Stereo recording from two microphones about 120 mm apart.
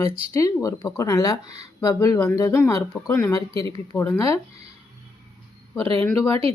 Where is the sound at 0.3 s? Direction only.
25° left (ahead or behind).